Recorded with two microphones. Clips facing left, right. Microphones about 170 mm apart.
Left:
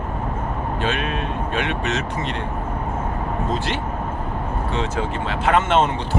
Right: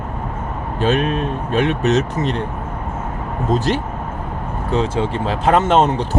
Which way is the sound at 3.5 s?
40° right (ahead or behind).